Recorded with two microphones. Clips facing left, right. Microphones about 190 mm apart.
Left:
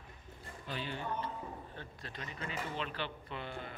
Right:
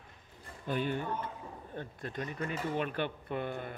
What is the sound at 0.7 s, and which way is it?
Speech, 50° right (ahead or behind).